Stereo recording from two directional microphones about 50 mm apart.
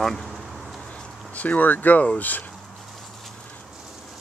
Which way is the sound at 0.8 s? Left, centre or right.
Left.